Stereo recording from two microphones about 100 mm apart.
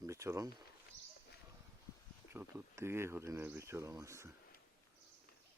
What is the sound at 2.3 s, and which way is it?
Speech, 25° right (ahead or behind).